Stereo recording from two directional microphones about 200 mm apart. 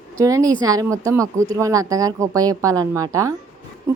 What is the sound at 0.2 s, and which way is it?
Speech, 15° right (ahead or behind).